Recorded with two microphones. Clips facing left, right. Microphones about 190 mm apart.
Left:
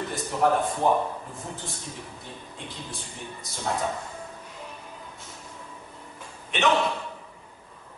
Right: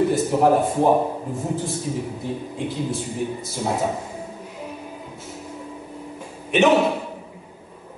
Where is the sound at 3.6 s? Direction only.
20° right (ahead or behind).